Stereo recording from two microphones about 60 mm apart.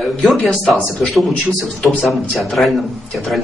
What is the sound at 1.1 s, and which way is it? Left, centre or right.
A man's voice, centre.